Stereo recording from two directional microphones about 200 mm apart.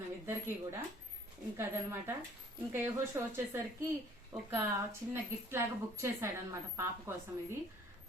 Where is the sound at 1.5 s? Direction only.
10° right (ahead or behind).